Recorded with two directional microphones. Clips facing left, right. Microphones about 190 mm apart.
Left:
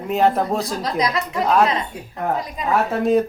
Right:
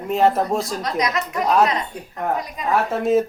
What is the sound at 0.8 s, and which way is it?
Speech, 30° left (ahead or behind).